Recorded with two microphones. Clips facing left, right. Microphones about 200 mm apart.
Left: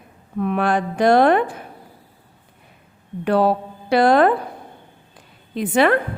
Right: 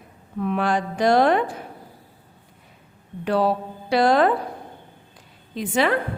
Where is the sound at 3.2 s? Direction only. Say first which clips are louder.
Left 3 dB; 55° left (ahead or behind).